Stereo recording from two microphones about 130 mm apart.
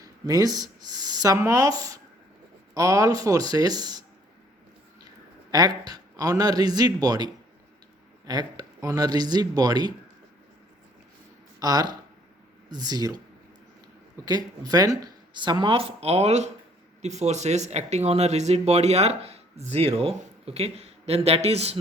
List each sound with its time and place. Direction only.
0.0 s speech: 30° right (ahead or behind)
5.5 s speech: 30° right (ahead or behind)
8.3 s speech: 30° right (ahead or behind)
11.6 s speech: 30° right (ahead or behind)
14.3 s speech: 30° right (ahead or behind); by 21.8 s 50° right (ahead or behind)